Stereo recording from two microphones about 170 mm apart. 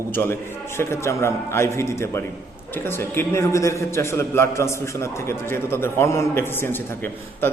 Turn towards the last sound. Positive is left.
turn(degrees=15)  # may be behind; listen again after turning